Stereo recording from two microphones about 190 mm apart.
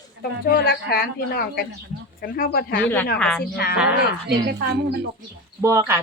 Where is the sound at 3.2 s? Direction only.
5° left (ahead or behind).